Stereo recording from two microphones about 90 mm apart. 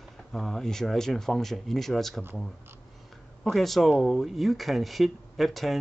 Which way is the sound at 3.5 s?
Centre (ahead or behind).